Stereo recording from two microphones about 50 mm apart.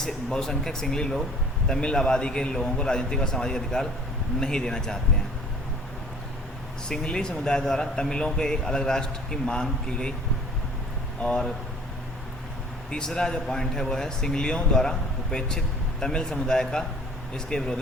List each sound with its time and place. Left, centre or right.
0.0 s speech: centre
6.8 s speech: centre
11.2 s speech: centre
12.9 s speech: centre